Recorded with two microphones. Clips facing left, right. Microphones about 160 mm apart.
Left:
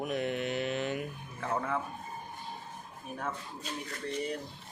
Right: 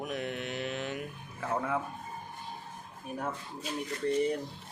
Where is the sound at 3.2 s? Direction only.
5° right (ahead or behind).